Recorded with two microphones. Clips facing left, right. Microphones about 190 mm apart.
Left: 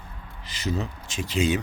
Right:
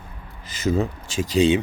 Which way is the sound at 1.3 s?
30° right (ahead or behind).